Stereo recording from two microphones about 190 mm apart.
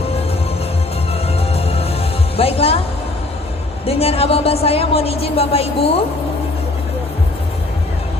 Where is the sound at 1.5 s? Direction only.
30° left (ahead or behind).